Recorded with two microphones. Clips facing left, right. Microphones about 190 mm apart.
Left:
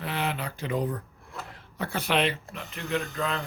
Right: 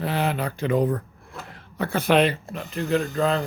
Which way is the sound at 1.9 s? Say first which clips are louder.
Right 7 dB; 45° right (ahead or behind).